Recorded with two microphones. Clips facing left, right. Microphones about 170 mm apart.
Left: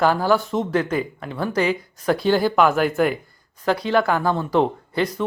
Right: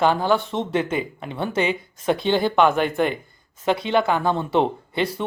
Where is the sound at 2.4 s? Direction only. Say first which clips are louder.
Left 1 dB; 5° left (ahead or behind).